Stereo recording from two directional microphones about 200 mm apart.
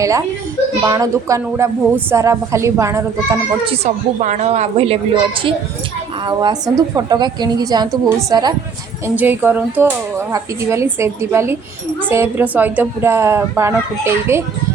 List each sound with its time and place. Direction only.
0.0 s a woman's voice: 15° right (ahead or behind)
3.7 s a woman's voice: 35° right (ahead or behind); by 8.5 s 20° right (ahead or behind)
9.0 s a woman's voice: 10° right (ahead or behind)